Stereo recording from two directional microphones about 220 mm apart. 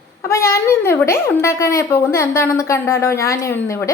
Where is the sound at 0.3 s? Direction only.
15° left (ahead or behind).